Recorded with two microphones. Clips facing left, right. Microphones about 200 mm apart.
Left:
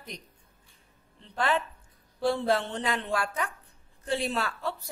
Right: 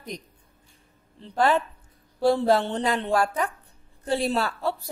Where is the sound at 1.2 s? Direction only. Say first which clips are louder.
Right 6 dB; 40° right (ahead or behind).